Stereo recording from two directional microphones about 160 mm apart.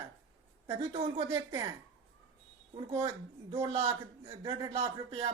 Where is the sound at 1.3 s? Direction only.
25° right (ahead or behind).